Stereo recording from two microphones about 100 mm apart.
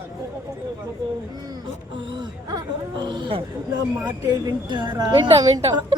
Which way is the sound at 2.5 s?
50° right (ahead or behind).